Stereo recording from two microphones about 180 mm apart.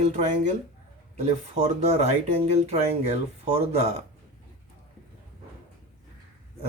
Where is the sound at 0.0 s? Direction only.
40° right (ahead or behind).